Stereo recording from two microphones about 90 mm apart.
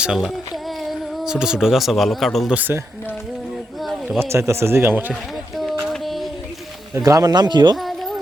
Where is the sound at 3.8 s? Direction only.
Centre (ahead or behind).